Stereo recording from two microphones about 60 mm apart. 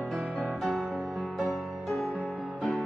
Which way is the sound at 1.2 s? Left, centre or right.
Centre.